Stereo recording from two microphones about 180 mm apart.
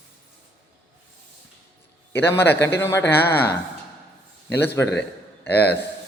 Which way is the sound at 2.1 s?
10° left (ahead or behind).